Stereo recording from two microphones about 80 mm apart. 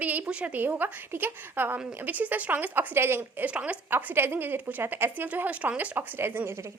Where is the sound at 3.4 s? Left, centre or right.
Centre.